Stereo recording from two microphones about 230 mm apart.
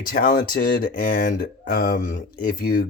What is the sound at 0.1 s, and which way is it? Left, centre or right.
Speech, left.